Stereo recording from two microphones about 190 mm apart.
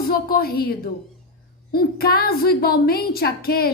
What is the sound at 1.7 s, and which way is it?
A woman's voice, 55° left (ahead or behind).